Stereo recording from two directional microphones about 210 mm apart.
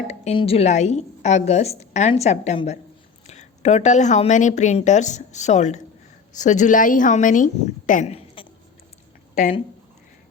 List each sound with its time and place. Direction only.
0.1 s a woman's voice: 30° left (ahead or behind)